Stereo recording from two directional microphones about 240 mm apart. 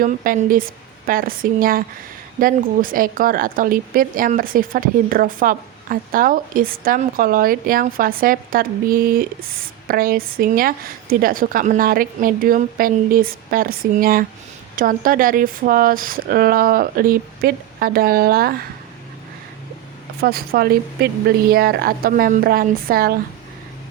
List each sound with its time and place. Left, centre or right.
0.0 s speech: right
20.2 s speech: right